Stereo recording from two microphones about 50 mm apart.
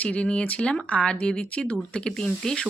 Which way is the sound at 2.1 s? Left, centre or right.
Centre.